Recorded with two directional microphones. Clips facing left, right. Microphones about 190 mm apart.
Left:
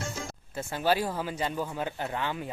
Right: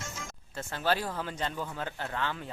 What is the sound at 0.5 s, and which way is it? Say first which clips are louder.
Speech: left 3 dB; 10° left (ahead or behind).